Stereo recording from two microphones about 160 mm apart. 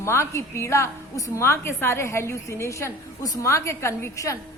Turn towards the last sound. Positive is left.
turn(degrees=20)  # may be behind; listen again after turning